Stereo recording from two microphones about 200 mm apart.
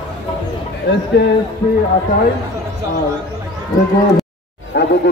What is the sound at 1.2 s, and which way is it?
Speech, 60° left (ahead or behind).